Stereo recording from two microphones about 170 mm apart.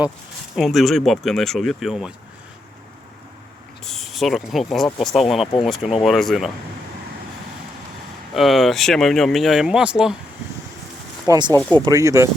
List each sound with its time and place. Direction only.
0.5 s speech: centre (ahead or behind)
3.8 s speech: centre (ahead or behind)
8.3 s speech: centre (ahead or behind)
11.3 s speech: 25° right (ahead or behind)